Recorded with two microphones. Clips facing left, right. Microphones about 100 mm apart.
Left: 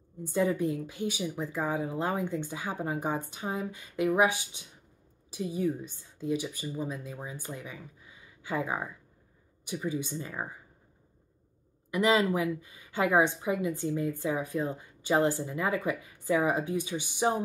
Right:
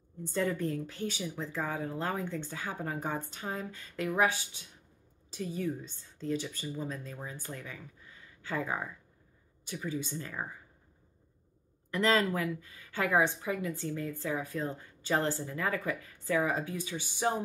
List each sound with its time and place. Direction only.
0.2 s a woman's voice: 15° left (ahead or behind)
11.9 s a woman's voice: 15° left (ahead or behind)